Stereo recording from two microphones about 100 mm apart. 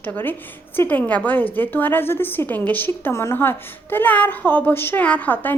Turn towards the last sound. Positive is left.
turn(degrees=20)  # may be behind; listen again after turning